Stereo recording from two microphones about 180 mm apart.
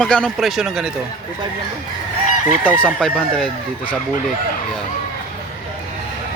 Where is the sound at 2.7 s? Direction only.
5° left (ahead or behind).